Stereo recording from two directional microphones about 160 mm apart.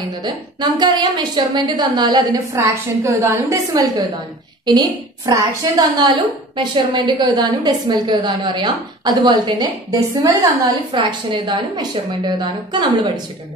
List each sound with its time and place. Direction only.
0.2 s a woman's voice: 25° right (ahead or behind)